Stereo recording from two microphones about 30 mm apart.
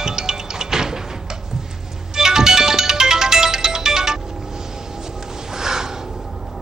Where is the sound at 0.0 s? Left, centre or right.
Centre.